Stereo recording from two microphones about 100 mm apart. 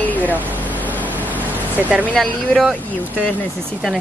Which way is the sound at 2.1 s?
Centre (ahead or behind).